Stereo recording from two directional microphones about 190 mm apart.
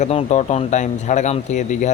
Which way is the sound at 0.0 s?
35° left (ahead or behind).